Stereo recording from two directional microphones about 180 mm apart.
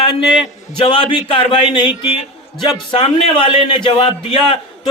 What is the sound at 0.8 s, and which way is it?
A man's voice, 25° left (ahead or behind).